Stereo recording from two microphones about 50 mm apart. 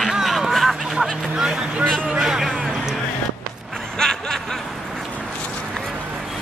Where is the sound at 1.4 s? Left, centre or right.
Centre.